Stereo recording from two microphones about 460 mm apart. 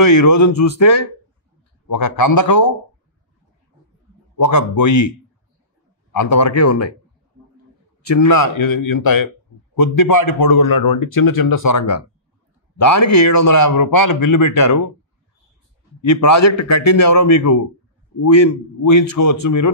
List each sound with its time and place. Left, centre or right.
0.0 s speech: left
4.5 s speech: left
6.1 s speech: left
8.2 s speech: left
16.1 s speech: left